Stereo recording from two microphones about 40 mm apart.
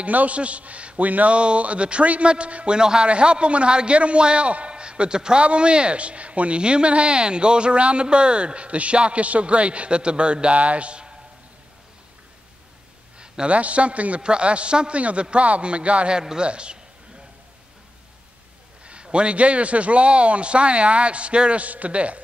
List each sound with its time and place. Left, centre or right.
0.0 s speech: right
1.3 s a man's voice: right
13.5 s a man's voice: right
18.9 s speech: right